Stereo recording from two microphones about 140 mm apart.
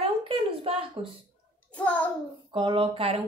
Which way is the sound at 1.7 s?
10° left (ahead or behind).